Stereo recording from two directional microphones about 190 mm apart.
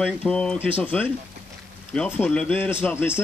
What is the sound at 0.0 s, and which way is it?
Speech, 5° left (ahead or behind).